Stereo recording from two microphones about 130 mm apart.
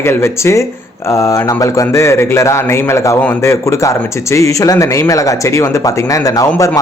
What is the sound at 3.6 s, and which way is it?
Speech, 25° left (ahead or behind).